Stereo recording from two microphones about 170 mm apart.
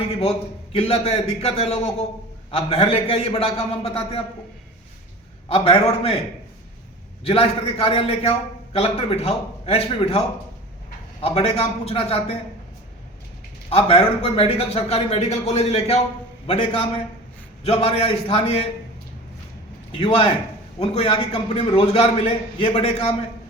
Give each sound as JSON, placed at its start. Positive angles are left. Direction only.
{"t": 0.2, "sound": "a man's voice", "side_deg": 35}
{"t": 5.5, "sound": "a man's voice", "side_deg": 35}
{"t": 7.3, "sound": "a man's voice", "side_deg": 35}
{"t": 13.7, "sound": "a man's voice", "side_deg": 35}
{"t": 19.9, "sound": "a man's voice", "side_deg": 35}